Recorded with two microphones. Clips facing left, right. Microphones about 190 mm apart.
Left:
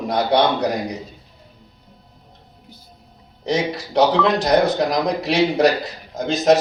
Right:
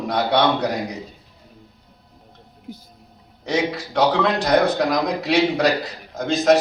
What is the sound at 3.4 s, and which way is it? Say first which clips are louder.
A man's voice: left 1 dB; 20° left (ahead or behind).